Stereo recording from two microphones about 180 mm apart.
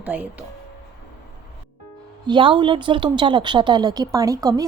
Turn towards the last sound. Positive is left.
turn(degrees=-20)  # may be behind; listen again after turning